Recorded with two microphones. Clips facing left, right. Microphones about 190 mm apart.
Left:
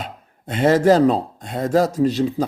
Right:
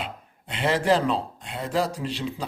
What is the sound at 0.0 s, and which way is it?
Speech, 45° left (ahead or behind).